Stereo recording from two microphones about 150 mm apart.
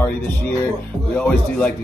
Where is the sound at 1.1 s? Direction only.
10° left (ahead or behind).